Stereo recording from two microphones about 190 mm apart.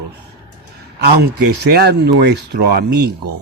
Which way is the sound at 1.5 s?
60° right (ahead or behind).